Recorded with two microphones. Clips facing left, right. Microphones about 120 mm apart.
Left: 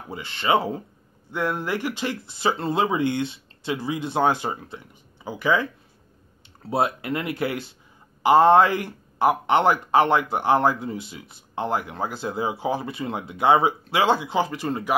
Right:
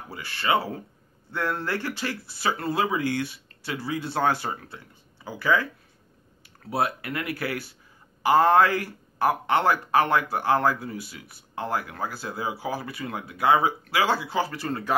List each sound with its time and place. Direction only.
0.1 s speech: 20° left (ahead or behind)